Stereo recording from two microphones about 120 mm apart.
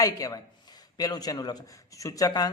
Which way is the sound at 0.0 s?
30° left (ahead or behind).